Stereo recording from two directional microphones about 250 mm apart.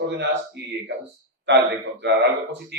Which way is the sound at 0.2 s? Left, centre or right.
Right.